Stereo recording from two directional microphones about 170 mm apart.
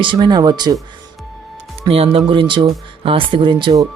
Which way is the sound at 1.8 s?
35° right (ahead or behind).